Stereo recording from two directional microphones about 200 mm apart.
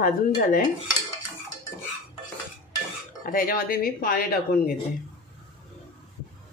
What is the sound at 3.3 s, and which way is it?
Speech, 45° left (ahead or behind).